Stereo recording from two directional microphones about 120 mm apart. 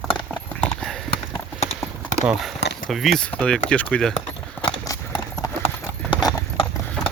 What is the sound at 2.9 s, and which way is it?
Speech, centre (ahead or behind).